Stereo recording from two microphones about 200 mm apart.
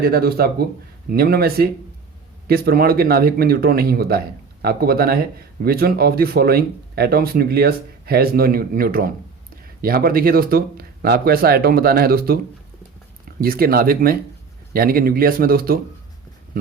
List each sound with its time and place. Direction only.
0.0 s speech: 50° right (ahead or behind)